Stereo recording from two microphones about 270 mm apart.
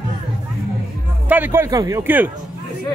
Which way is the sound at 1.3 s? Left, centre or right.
Centre.